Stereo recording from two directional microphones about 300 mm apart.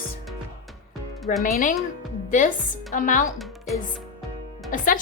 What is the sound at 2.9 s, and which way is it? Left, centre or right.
Speech, left.